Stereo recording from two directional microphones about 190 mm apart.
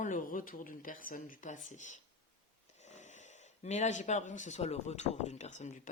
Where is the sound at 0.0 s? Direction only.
45° left (ahead or behind).